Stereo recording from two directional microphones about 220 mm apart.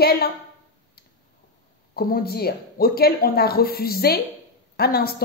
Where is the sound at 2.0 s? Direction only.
45° left (ahead or behind).